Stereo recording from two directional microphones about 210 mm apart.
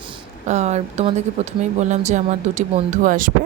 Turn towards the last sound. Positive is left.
turn(degrees=-40)  # may be behind; listen again after turning